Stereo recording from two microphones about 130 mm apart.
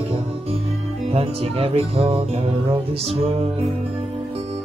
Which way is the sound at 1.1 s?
50° right (ahead or behind).